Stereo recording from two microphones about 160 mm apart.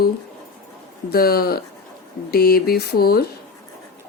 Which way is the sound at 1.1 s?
70° left (ahead or behind).